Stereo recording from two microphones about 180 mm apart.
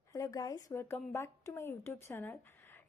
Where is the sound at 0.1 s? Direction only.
20° left (ahead or behind).